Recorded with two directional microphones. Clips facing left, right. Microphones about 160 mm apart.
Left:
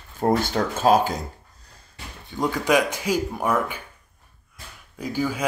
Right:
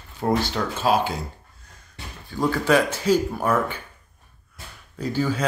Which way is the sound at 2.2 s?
20° left (ahead or behind).